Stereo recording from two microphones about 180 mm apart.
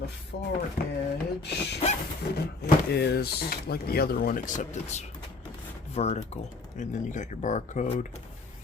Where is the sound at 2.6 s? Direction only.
65° left (ahead or behind); by 8.2 s 45° left (ahead or behind).